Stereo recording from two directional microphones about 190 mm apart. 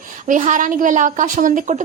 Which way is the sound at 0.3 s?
40° right (ahead or behind).